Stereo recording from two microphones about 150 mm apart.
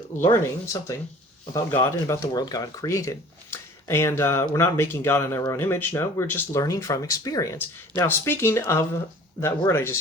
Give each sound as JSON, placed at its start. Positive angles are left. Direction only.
{"t": 0.3, "sound": "speech", "side_deg": 20}